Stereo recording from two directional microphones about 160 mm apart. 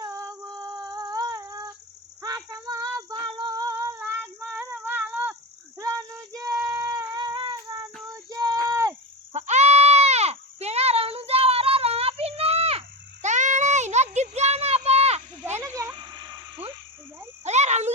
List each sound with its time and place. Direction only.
0.0 s female singing: 20° right (ahead or behind)
2.6 s child singing: 25° right (ahead or behind)
3.1 s female singing: 30° right (ahead or behind)
6.7 s cat: 15° right (ahead or behind)
8.1 s child singing: 20° right (ahead or behind)
9.3 s goat: 45° right (ahead or behind)
13.2 s a sound: 50° right (ahead or behind)
15.5 s a sound: 20° right (ahead or behind)
17.4 s a sound: 45° right (ahead or behind)